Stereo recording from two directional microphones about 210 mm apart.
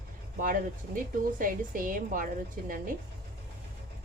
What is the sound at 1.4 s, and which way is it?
Speech, 40° right (ahead or behind).